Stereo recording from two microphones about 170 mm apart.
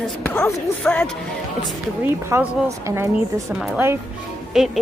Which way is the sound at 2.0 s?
15° right (ahead or behind).